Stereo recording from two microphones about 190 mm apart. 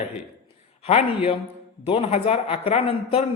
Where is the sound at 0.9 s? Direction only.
30° left (ahead or behind).